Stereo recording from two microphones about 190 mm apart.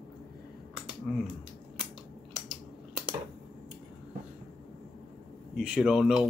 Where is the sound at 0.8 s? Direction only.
5° right (ahead or behind).